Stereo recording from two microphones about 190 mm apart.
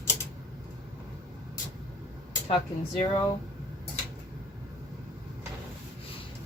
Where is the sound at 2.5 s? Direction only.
35° left (ahead or behind).